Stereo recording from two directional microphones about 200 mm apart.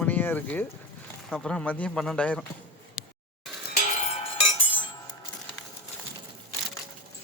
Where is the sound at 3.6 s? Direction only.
40° left (ahead or behind).